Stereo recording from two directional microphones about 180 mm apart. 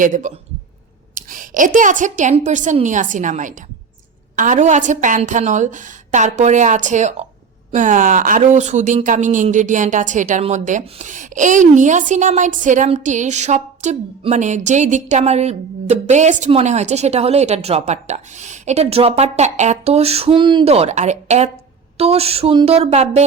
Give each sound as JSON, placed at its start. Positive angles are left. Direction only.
{"t": 0.0, "sound": "a woman's voice", "side_deg": -45}